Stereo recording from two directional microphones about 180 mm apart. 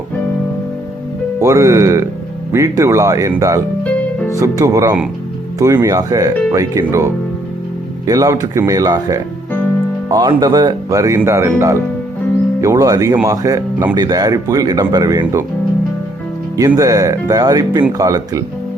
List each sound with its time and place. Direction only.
1.4 s speech: 15° right (ahead or behind)
3.8 s music: 10° left (ahead or behind)
4.4 s speech: 20° right (ahead or behind)
12.6 s speech: 20° right (ahead or behind)
16.6 s speech: 20° right (ahead or behind)